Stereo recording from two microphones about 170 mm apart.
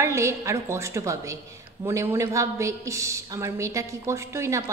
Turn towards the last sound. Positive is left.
turn(degrees=-15)  # may be behind; listen again after turning